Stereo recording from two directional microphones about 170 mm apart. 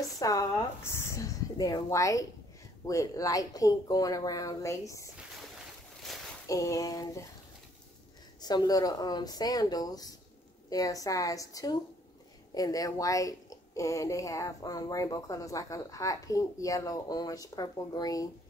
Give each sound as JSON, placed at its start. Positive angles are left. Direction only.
{"t": 0.2, "sound": "speech", "side_deg": 20}
{"t": 6.1, "sound": "a sound", "side_deg": 0}
{"t": 6.4, "sound": "speech", "side_deg": 20}
{"t": 8.4, "sound": "speech", "side_deg": 25}